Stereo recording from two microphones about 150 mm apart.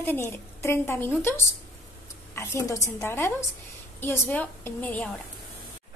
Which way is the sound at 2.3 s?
20° left (ahead or behind).